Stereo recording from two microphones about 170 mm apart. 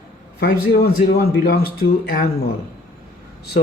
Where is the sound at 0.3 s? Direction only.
65° left (ahead or behind).